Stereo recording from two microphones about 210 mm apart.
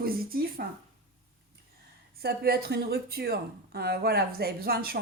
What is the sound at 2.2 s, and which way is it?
Speech, 50° right (ahead or behind).